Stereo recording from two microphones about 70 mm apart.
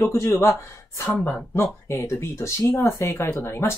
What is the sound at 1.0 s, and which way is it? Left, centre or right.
Speech, left.